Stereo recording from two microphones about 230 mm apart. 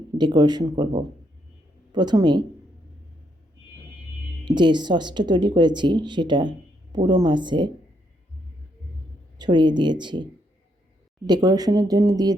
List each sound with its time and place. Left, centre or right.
0.2 s speech: centre
4.4 s speech: centre
9.4 s speech: centre
11.3 s speech: centre